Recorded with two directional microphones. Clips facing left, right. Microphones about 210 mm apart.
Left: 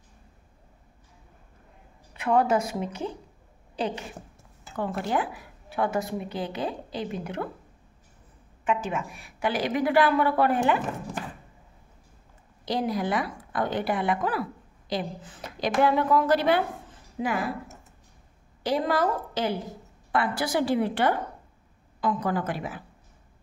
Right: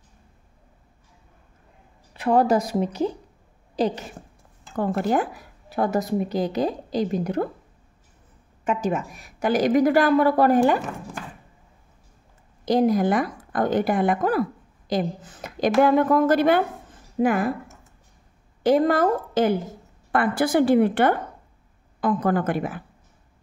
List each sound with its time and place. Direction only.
2.1 s a woman's voice: 35° right (ahead or behind)
8.6 s a woman's voice: 40° right (ahead or behind)
12.6 s a woman's voice: 45° right (ahead or behind)
18.6 s a woman's voice: 50° right (ahead or behind)